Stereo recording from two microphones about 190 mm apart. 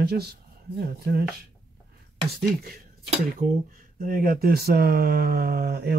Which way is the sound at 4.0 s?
45° right (ahead or behind).